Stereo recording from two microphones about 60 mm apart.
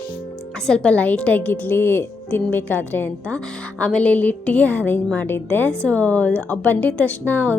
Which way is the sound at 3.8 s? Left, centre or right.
Centre.